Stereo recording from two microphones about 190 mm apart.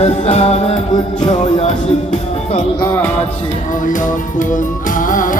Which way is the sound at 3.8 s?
40° left (ahead or behind).